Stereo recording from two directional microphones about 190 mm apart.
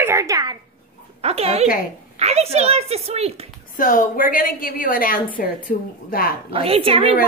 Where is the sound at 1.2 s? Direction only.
35° right (ahead or behind).